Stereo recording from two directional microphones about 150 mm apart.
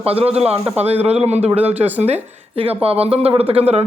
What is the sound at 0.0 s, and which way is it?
A woman's voice, 40° right (ahead or behind).